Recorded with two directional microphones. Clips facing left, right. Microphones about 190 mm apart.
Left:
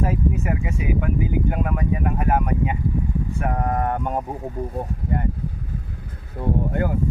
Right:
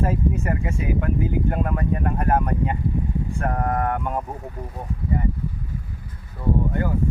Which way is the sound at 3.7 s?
20° left (ahead or behind).